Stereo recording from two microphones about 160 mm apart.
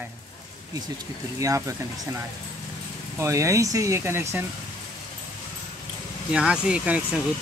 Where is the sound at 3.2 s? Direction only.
20° right (ahead or behind).